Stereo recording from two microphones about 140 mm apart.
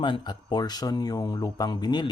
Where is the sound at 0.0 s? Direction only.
35° left (ahead or behind).